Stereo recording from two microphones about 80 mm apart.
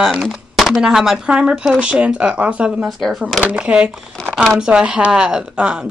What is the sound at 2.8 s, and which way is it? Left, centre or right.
Speech, centre.